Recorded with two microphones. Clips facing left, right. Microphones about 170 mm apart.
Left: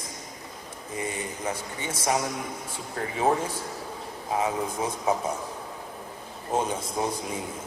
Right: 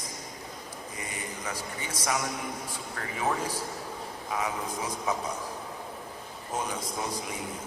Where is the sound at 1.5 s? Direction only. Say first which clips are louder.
Left 4 dB; 25° left (ahead or behind).